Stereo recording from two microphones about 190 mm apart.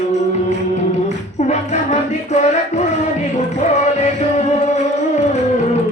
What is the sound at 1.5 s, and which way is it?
Music, 35° left (ahead or behind).